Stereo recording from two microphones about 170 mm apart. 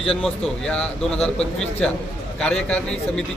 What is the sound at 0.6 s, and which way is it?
A man's voice, 5° left (ahead or behind).